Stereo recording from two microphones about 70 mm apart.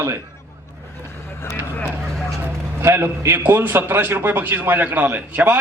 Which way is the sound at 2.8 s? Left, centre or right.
Right.